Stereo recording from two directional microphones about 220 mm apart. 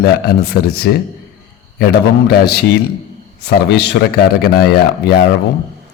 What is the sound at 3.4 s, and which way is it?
A man's voice, 50° left (ahead or behind).